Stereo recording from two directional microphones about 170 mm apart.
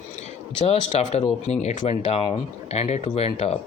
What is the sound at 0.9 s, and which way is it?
Speech, 40° left (ahead or behind).